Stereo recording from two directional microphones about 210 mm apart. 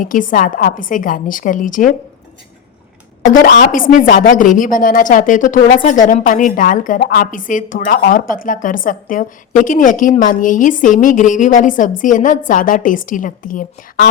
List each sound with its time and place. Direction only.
0.0 s a woman's voice: 40° left (ahead or behind)
3.5 s a woman's voice: 40° left (ahead or behind)